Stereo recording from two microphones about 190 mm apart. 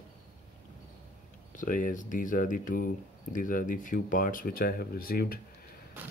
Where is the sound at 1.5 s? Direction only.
45° left (ahead or behind).